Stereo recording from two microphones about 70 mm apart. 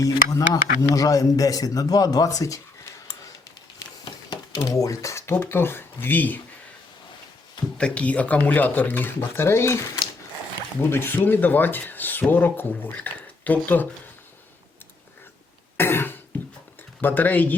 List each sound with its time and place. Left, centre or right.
0.0 s speech: left
4.3 s a sound: left
4.7 s speech: left
7.8 s speech: centre; by 9.8 s left
10.8 s speech: left
15.8 s cough: left
17.0 s speech: left